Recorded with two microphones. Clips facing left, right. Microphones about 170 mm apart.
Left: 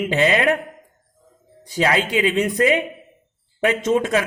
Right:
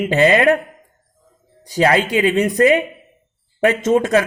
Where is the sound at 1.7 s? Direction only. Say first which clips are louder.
Right 4 dB; 45° right (ahead or behind).